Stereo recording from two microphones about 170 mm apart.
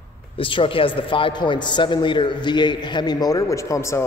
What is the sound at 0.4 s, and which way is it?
A man's voice, 30° left (ahead or behind).